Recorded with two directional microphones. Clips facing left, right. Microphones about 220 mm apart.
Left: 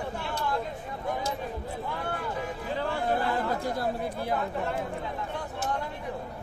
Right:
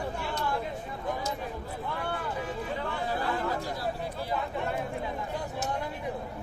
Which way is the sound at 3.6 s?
55° left (ahead or behind).